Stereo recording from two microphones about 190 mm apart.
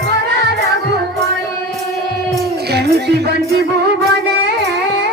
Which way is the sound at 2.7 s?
60° right (ahead or behind).